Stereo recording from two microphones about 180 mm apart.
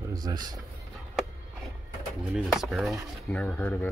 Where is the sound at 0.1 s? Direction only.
20° right (ahead or behind).